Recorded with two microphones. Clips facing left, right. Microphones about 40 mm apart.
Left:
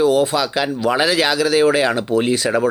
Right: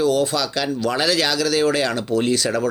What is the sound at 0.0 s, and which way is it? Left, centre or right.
Speech, centre.